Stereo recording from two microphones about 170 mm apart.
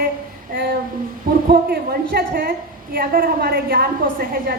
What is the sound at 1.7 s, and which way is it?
A woman's voice, 65° right (ahead or behind).